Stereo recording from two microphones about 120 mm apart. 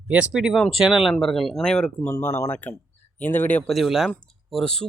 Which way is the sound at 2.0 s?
20° left (ahead or behind).